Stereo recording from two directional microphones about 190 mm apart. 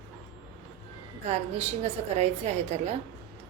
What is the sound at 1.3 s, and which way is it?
A woman's voice, 35° right (ahead or behind).